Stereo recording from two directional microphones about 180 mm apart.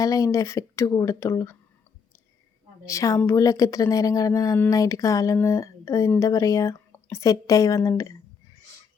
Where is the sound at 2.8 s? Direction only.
15° left (ahead or behind).